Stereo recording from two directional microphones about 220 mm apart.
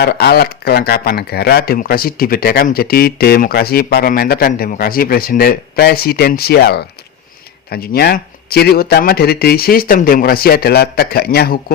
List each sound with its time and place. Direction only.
0.0 s speech: 45° left (ahead or behind)